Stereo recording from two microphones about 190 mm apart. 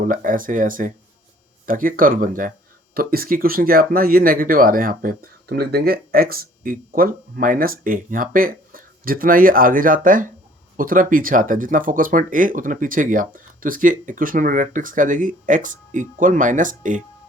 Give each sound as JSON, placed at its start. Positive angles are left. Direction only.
{"t": 0.0, "sound": "speech", "side_deg": -45}